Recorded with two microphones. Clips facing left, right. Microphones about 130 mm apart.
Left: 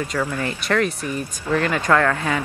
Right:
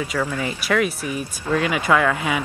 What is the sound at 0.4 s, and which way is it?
Speech, 5° right (ahead or behind).